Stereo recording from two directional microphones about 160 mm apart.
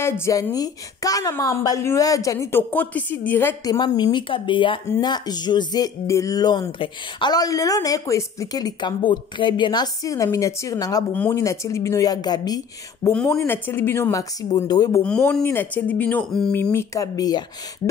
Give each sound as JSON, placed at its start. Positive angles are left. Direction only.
{"t": 0.0, "sound": "a woman's voice", "side_deg": 15}
{"t": 3.7, "sound": "speech", "side_deg": 25}
{"t": 13.1, "sound": "a woman's voice", "side_deg": 10}
{"t": 15.0, "sound": "a woman's voice", "side_deg": 5}
{"t": 16.7, "sound": "speech", "side_deg": 20}